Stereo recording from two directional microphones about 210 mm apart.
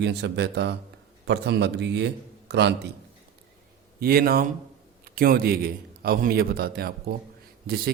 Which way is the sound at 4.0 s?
45° right (ahead or behind).